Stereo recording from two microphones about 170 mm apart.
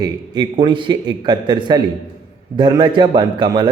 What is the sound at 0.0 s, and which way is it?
A man's voice, 25° right (ahead or behind).